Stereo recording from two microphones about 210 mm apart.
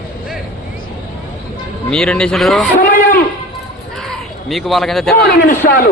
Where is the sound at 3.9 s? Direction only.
Centre (ahead or behind).